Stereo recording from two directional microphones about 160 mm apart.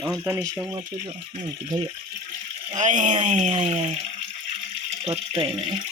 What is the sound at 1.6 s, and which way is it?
Speech, 30° right (ahead or behind).